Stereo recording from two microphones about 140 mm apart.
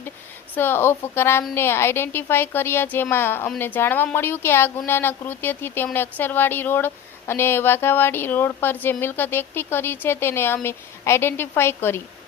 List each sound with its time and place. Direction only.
0.5 s speech: 15° left (ahead or behind)